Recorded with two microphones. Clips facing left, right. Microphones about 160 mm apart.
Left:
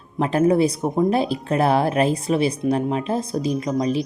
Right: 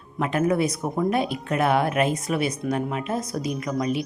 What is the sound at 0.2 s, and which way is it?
Speech, 35° left (ahead or behind).